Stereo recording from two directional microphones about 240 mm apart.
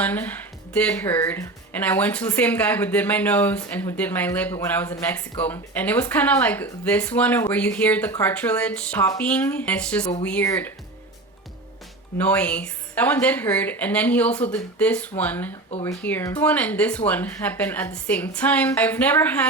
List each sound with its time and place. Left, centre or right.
0.0 s speech: centre
12.1 s a woman's voice: centre